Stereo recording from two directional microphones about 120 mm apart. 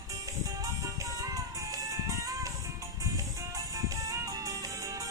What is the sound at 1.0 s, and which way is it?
Music, 30° right (ahead or behind).